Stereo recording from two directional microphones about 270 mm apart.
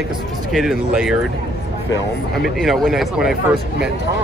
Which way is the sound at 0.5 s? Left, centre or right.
Centre.